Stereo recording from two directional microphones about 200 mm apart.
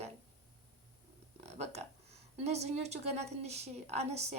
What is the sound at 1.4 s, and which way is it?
A woman's voice, 30° right (ahead or behind).